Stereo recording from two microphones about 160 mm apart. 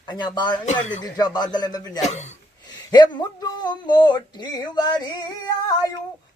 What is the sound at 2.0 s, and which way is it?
Speech, 45° left (ahead or behind).